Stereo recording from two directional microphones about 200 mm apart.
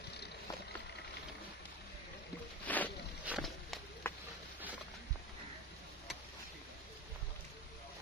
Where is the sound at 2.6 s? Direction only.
10° left (ahead or behind).